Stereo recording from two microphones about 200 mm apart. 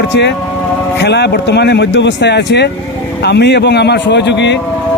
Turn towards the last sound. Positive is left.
turn(degrees=60)  # may be behind; listen again after turning